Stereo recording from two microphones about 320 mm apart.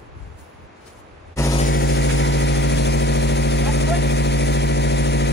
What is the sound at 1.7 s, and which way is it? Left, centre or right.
Vehicle, left.